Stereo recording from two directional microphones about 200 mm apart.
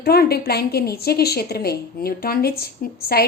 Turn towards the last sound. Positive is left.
turn(degrees=50)  # may be behind; listen again after turning